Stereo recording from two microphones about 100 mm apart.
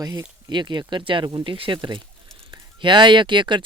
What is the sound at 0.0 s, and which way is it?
Speech, 40° right (ahead or behind).